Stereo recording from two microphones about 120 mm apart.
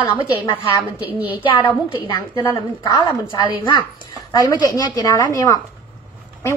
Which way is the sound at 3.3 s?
40° left (ahead or behind).